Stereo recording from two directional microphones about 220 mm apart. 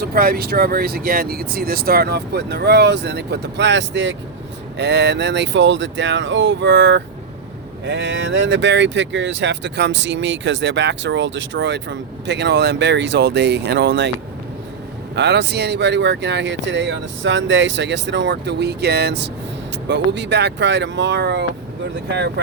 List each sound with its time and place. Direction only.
0.0 s speech: 45° right (ahead or behind)
15.1 s speech: 50° right (ahead or behind)